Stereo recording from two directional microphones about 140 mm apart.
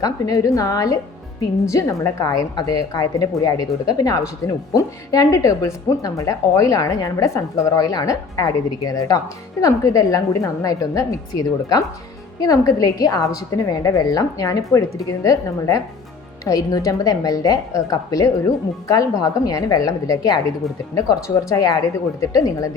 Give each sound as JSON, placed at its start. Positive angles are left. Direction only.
{"t": 0.0, "sound": "a woman's voice", "side_deg": 25}